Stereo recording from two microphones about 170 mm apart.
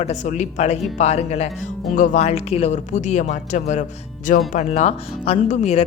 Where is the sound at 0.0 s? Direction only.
45° left (ahead or behind).